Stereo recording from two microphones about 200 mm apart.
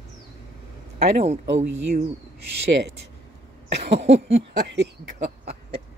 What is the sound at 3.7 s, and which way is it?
Speech, 60° right (ahead or behind).